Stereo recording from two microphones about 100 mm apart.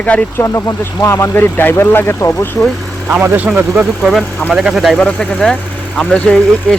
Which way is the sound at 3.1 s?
20° right (ahead or behind).